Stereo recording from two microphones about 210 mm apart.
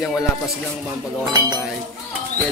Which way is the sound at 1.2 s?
20° right (ahead or behind).